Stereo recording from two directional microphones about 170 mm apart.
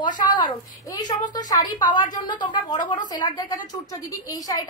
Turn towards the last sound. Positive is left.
turn(degrees=20)  # may be behind; listen again after turning